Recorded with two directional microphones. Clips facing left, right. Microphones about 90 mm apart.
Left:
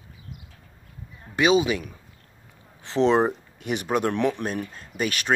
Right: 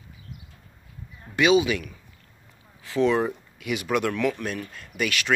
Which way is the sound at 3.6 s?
40° left (ahead or behind).